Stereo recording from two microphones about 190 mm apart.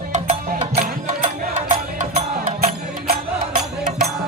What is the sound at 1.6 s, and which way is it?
Music, 35° right (ahead or behind).